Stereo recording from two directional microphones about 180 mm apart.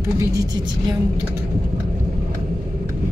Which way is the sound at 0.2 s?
20° right (ahead or behind).